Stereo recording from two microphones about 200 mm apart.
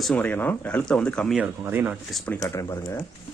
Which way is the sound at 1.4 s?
10° right (ahead or behind).